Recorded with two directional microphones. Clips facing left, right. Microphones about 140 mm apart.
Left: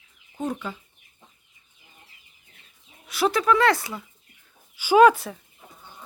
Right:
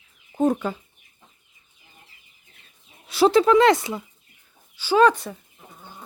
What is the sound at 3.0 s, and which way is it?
Speech, 30° right (ahead or behind).